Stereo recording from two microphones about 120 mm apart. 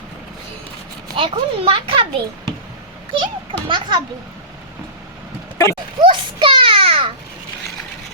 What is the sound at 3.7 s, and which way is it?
Speech, 40° right (ahead or behind).